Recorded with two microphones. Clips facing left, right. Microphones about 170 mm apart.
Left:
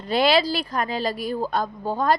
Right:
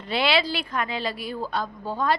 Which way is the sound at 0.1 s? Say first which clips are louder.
Left 4 dB; 40° left (ahead or behind).